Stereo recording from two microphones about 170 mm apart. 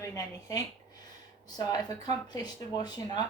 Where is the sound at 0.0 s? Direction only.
20° left (ahead or behind).